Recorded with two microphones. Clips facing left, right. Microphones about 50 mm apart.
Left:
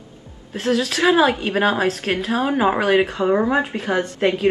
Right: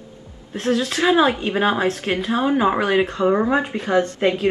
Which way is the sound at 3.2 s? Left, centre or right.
Centre.